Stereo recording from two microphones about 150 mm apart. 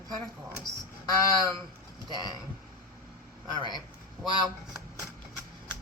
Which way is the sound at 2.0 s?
30° right (ahead or behind).